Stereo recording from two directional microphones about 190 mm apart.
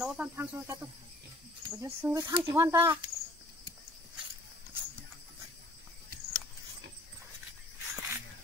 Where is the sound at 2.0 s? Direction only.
15° right (ahead or behind).